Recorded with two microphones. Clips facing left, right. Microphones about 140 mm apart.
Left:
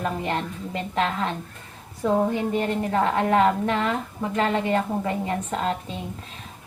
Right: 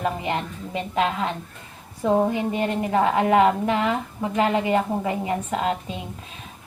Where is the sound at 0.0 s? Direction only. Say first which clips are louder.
Right 1 dB; 10° right (ahead or behind).